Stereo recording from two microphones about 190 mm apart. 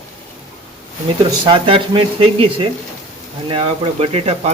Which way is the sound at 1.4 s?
25° right (ahead or behind).